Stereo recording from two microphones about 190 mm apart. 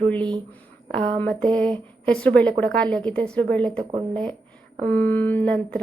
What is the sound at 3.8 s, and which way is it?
Speech, 25° right (ahead or behind).